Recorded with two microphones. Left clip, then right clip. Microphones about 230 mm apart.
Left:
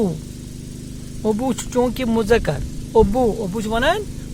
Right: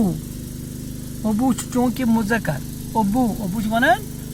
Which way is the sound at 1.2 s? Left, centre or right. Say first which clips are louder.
Left 1 dB; left.